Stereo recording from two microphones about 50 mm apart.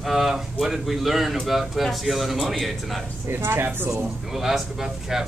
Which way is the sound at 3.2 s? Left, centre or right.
Right.